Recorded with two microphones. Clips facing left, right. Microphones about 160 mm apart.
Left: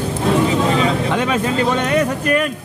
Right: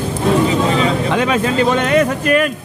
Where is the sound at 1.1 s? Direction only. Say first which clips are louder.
Right 2 dB; 90° right.